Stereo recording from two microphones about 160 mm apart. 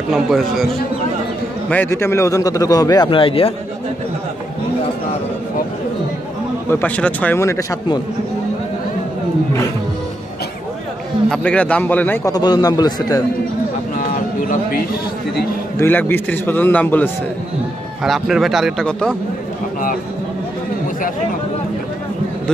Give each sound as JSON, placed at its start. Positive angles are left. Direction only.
{"t": 0.1, "sound": "a man's voice", "side_deg": 0}
{"t": 1.7, "sound": "speech", "side_deg": 15}
{"t": 6.7, "sound": "a man's voice", "side_deg": 10}
{"t": 11.2, "sound": "a man's voice", "side_deg": 5}
{"t": 12.3, "sound": "speech", "side_deg": 25}
{"t": 13.9, "sound": "a sound", "side_deg": 60}
{"t": 15.8, "sound": "a man's voice", "side_deg": 10}
{"t": 18.0, "sound": "a man's voice", "side_deg": 0}